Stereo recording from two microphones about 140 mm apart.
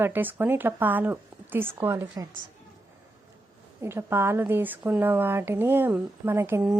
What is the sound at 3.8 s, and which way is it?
Speech, 20° right (ahead or behind).